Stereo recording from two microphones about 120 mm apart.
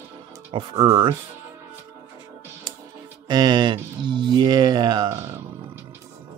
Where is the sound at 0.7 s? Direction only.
25° right (ahead or behind).